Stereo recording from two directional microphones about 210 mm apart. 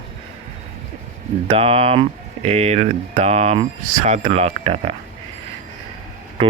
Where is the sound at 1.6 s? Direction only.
30° right (ahead or behind).